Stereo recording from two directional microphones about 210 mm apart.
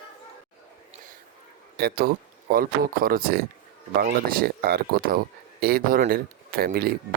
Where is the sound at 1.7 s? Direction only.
50° right (ahead or behind).